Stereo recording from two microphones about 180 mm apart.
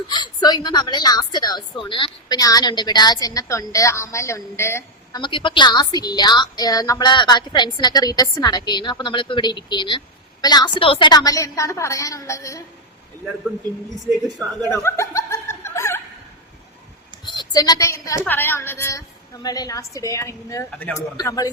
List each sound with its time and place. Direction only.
0.1 s a woman's voice: 25° left (ahead or behind)
5.2 s a woman's voice: 25° left (ahead or behind)
14.7 s snicker: 15° left (ahead or behind)
17.2 s a woman's voice: 25° left (ahead or behind)